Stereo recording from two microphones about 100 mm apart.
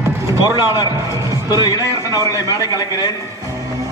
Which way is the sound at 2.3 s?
35° left (ahead or behind).